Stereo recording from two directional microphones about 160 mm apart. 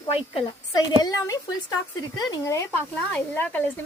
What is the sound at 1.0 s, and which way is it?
Speech, 20° left (ahead or behind).